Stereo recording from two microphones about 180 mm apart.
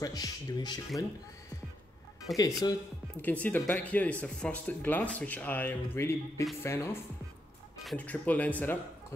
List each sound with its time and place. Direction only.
0.0 s speech: 20° left (ahead or behind)
2.3 s speech: centre (ahead or behind)